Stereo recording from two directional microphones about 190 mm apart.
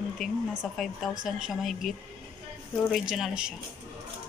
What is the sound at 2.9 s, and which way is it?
Speech, centre (ahead or behind).